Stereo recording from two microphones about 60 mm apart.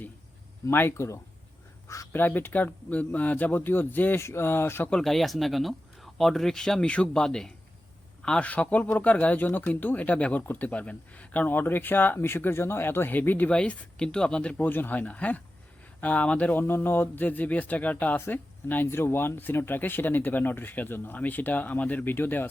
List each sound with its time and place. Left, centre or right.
0.7 s speech: left
0.9 s speech: left
2.1 s speech: left
4.2 s speech: left
5.0 s speech: centre; by 13.5 s left
13.5 s speech: centre
14.7 s speech: left
16.6 s speech: left